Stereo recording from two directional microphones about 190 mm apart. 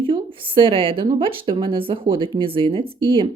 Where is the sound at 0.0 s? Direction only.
25° right (ahead or behind).